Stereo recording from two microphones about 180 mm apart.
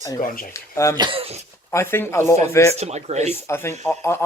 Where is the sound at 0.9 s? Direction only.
30° right (ahead or behind).